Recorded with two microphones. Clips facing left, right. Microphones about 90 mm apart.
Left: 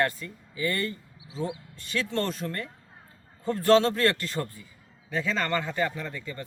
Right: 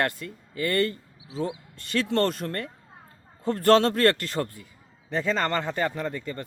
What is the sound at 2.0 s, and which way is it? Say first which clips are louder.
Speech: right 6 dB; 65° right (ahead or behind).